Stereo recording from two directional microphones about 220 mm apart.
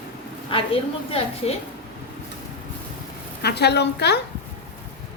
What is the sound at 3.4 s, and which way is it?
Speech, 50° left (ahead or behind).